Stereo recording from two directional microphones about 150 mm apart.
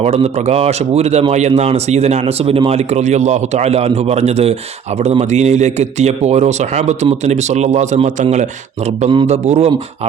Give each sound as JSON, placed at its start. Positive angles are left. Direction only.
{"t": 0.0, "sound": "speech", "side_deg": -45}